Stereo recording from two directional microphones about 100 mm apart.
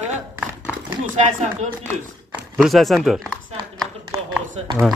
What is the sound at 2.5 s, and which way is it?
Speech, centre (ahead or behind).